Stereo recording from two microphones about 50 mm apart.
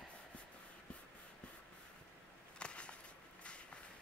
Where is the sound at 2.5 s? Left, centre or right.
Left.